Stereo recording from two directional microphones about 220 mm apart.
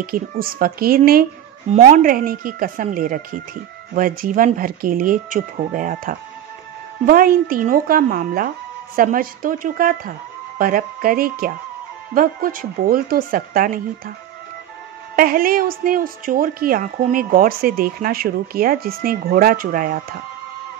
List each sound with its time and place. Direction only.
0.0 s a woman's voice: 40° right (ahead or behind)
15.1 s a woman's voice: 40° right (ahead or behind)